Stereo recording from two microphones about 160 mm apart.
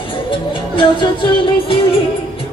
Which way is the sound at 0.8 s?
30° left (ahead or behind).